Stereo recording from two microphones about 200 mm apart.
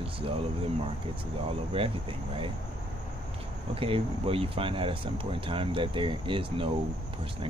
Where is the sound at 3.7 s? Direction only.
25° right (ahead or behind).